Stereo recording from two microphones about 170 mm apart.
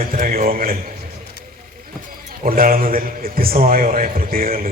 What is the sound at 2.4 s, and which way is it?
A man's voice, 55° right (ahead or behind).